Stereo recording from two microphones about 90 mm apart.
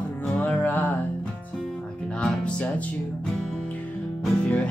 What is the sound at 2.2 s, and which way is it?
Music, 10° left (ahead or behind).